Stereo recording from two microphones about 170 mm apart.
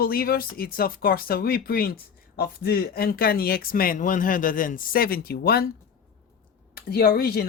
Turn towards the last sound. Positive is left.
turn(degrees=65)  # may be behind; listen again after turning